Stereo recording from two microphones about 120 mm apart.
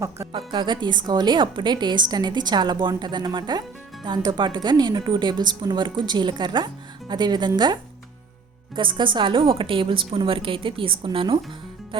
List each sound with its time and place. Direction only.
0.3 s a woman's voice: 45° right (ahead or behind)